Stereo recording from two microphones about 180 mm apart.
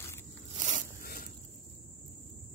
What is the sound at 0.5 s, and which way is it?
Zipper, 45° right (ahead or behind).